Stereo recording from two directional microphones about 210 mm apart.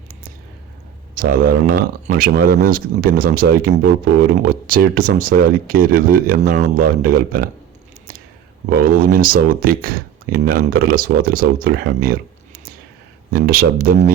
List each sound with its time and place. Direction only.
1.1 s speech: 45° right (ahead or behind)
8.7 s speech: 45° right (ahead or behind)
13.3 s speech: 45° right (ahead or behind)